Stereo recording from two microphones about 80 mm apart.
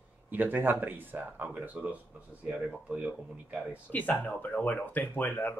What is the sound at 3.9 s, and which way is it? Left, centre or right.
Speech, left.